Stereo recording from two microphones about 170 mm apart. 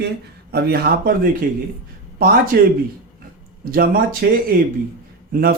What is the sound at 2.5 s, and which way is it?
Speech, 70° right (ahead or behind).